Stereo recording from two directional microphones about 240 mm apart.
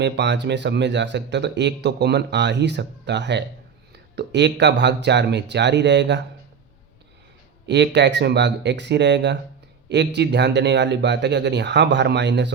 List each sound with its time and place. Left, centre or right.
0.0 s speech: right
7.7 s speech: right